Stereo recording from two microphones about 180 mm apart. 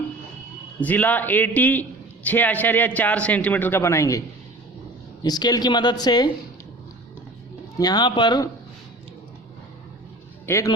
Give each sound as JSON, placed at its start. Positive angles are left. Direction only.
{"t": 0.8, "sound": "a man's voice", "side_deg": 10}
{"t": 5.2, "sound": "speech", "side_deg": 20}
{"t": 7.8, "sound": "speech", "side_deg": 20}
{"t": 10.4, "sound": "a man's voice", "side_deg": 15}